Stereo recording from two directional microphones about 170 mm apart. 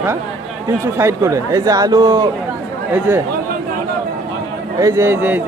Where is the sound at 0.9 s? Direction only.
15° right (ahead or behind).